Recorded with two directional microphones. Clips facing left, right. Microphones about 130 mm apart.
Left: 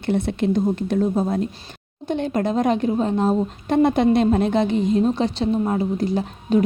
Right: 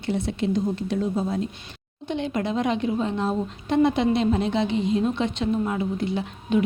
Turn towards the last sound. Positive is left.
turn(degrees=40)  # may be behind; listen again after turning